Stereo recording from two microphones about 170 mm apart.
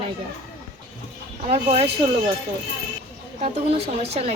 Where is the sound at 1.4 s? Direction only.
35° right (ahead or behind).